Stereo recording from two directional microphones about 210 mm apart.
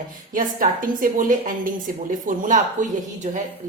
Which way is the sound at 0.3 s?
40° right (ahead or behind).